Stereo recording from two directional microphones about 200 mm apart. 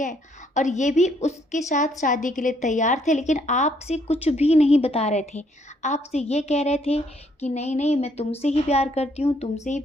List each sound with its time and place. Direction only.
0.0 s speech: 40° left (ahead or behind)